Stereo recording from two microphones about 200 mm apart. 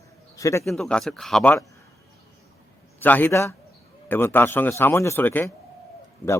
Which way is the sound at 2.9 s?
10° left (ahead or behind).